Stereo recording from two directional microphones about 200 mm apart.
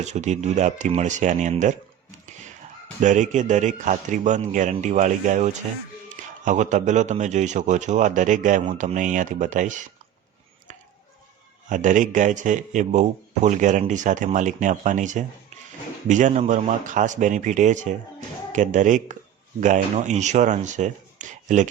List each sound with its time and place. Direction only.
0.0 s a man's voice: 35° right (ahead or behind)
3.0 s a man's voice: 35° right (ahead or behind)
11.7 s a man's voice: 40° right (ahead or behind)